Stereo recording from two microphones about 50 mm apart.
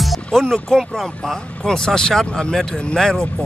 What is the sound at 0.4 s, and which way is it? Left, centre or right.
Speech, centre.